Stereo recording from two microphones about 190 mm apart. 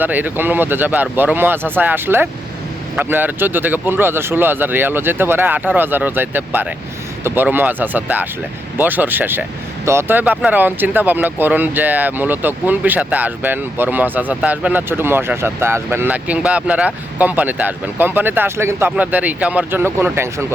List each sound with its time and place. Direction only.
0.0 s speech: 10° right (ahead or behind)